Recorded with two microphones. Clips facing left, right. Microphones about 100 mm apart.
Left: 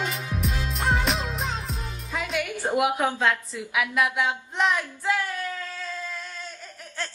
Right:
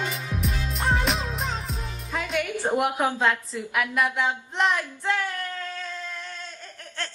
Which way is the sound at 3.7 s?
5° left (ahead or behind).